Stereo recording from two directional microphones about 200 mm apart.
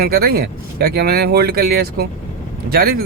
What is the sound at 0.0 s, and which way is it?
Speech, 50° right (ahead or behind).